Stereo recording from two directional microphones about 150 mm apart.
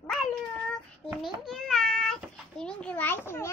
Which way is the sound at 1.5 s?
Centre (ahead or behind).